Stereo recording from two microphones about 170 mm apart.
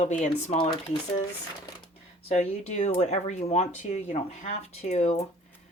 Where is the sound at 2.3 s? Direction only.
40° left (ahead or behind).